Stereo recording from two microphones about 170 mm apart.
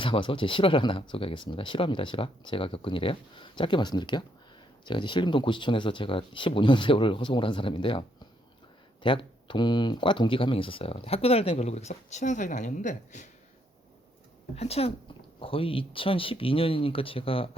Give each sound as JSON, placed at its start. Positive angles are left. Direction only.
{"t": 0.0, "sound": "speech", "side_deg": 30}
{"t": 9.0, "sound": "speech", "side_deg": 30}
{"t": 14.5, "sound": "speech", "side_deg": 35}